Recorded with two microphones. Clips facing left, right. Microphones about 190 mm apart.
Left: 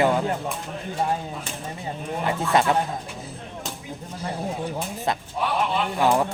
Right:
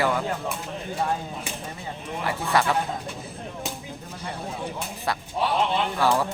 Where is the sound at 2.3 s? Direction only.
20° left (ahead or behind).